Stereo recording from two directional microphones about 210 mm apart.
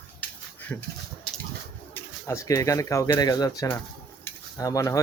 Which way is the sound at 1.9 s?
15° left (ahead or behind).